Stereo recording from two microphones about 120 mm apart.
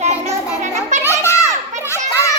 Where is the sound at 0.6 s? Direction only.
75° right (ahead or behind).